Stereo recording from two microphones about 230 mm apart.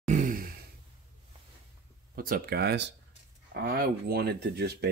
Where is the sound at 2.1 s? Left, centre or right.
Right.